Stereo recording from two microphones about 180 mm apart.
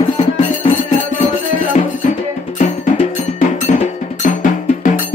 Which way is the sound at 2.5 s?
40° left (ahead or behind).